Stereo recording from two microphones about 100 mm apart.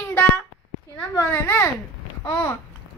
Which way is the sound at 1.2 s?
20° left (ahead or behind).